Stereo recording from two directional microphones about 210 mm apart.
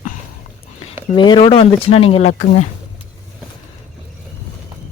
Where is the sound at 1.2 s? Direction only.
25° left (ahead or behind).